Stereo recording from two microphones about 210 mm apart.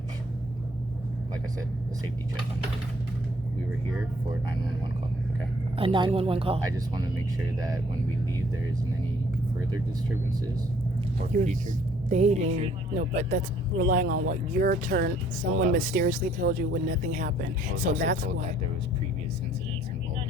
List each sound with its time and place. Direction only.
5.7 s speech: 25° right (ahead or behind)
11.3 s speech: 35° right (ahead or behind)